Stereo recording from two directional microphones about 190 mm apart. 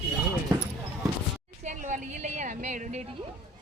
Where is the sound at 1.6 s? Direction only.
40° right (ahead or behind).